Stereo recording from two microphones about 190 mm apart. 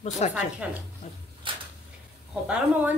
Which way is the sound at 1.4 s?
25° right (ahead or behind).